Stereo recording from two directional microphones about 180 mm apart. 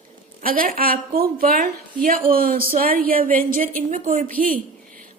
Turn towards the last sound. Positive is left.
turn(degrees=-50)  # may be behind; listen again after turning